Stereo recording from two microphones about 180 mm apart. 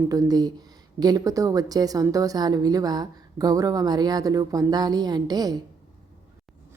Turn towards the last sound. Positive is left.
turn(degrees=-20)  # may be behind; listen again after turning